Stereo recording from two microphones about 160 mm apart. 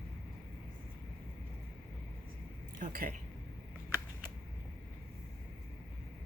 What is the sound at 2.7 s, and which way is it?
Speech, 60° right (ahead or behind).